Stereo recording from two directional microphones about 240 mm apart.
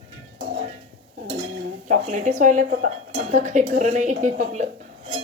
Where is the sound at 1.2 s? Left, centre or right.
Right.